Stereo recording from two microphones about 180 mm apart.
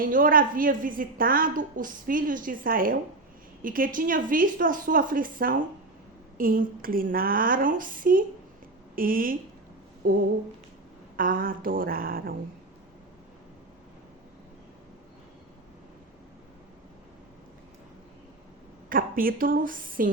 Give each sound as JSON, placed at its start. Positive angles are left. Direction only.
{"t": 0.0, "sound": "a woman's voice", "side_deg": -50}
{"t": 18.9, "sound": "a woman's voice", "side_deg": -50}